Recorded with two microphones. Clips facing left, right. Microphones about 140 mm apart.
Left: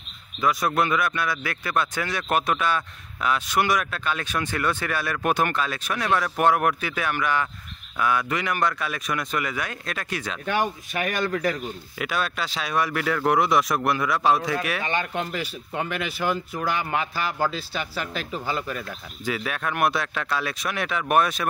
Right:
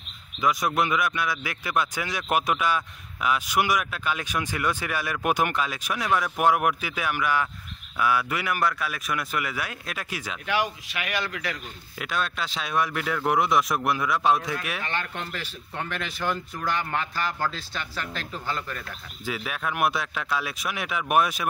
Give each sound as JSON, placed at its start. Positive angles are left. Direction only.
{"t": 0.4, "sound": "speech", "side_deg": -15}
{"t": 10.4, "sound": "speech", "side_deg": 50}
{"t": 12.0, "sound": "speech", "side_deg": 5}
{"t": 14.8, "sound": "speech", "side_deg": 15}
{"t": 19.2, "sound": "speech", "side_deg": -5}